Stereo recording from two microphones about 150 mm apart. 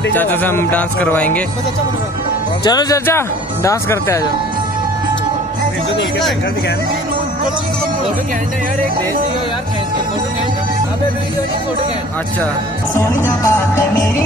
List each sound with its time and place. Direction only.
0.1 s speech: 10° left (ahead or behind)
2.6 s speech: 25° left (ahead or behind)
13.4 s speech: 20° left (ahead or behind)